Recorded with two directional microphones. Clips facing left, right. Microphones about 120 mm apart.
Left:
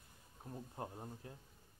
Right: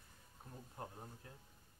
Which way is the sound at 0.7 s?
20° left (ahead or behind).